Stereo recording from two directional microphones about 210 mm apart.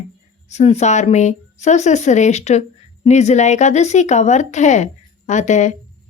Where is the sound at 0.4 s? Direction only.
30° left (ahead or behind).